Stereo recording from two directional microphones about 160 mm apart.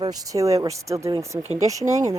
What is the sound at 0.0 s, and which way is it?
Speech, 20° right (ahead or behind).